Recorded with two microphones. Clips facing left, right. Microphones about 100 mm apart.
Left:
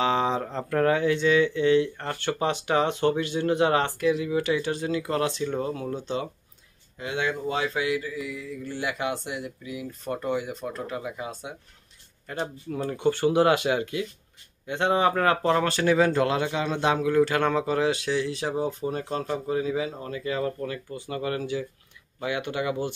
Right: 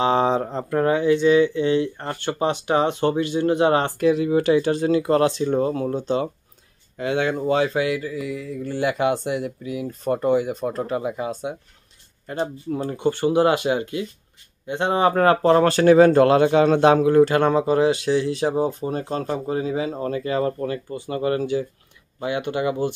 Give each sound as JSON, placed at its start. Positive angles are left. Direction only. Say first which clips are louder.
{"t": 0.0, "sound": "a sound", "louder": "right 5 dB", "side_deg": -35}
{"t": 0.5, "sound": "speech", "louder": "right 3 dB", "side_deg": -20}
{"t": 1.2, "sound": "speech", "louder": "right 4 dB", "side_deg": -25}
{"t": 4.0, "sound": "speech", "louder": "right 6 dB", "side_deg": -45}
{"t": 7.0, "sound": "speech", "louder": "right 6 dB", "side_deg": -60}
{"t": 10.1, "sound": "speech", "louder": "right 8 dB", "side_deg": -35}
{"t": 12.3, "sound": "speech", "louder": "right 6 dB", "side_deg": -30}
{"t": 17.2, "sound": "speech", "louder": "right 6 dB", "side_deg": -30}